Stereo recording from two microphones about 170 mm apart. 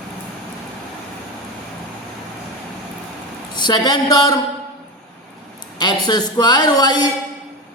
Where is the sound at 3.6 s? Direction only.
25° left (ahead or behind).